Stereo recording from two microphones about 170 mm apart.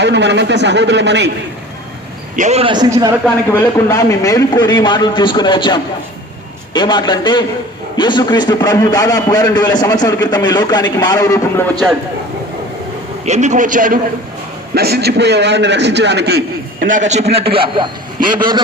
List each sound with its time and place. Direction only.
0.0 s a man's voice: 90° right
2.3 s a man's voice: 45° right (ahead or behind)
2.7 s a man's voice: 20° right (ahead or behind)
3.5 s a man's voice: 15° left (ahead or behind)
13.2 s a man's voice: 45° right (ahead or behind)
14.8 s a man's voice: 70° right (ahead or behind)
16.8 s a man's voice: 45° right (ahead or behind); by 18.6 s 25° right (ahead or behind)